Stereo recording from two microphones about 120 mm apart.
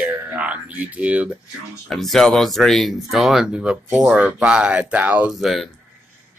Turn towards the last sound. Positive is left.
turn(degrees=0)  # may be behind; listen again after turning